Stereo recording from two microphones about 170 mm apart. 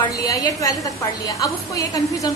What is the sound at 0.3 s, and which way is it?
A woman's voice, 20° left (ahead or behind).